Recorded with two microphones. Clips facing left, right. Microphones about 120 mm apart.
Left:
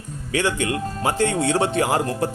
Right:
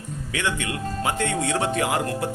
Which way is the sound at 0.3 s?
35° left (ahead or behind).